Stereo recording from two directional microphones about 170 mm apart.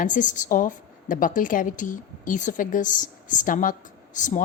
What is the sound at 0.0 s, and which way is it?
A woman's voice, 50° left (ahead or behind).